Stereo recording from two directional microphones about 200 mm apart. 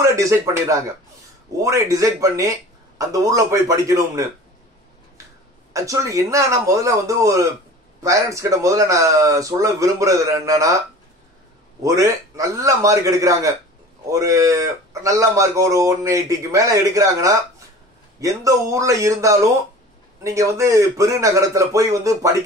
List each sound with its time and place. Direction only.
0.0 s a man's voice: 15° right (ahead or behind)
5.7 s a man's voice: 15° right (ahead or behind)
11.8 s a man's voice: 15° right (ahead or behind)